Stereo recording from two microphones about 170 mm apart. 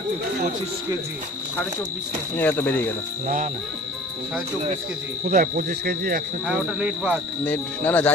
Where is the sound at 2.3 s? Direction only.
10° left (ahead or behind).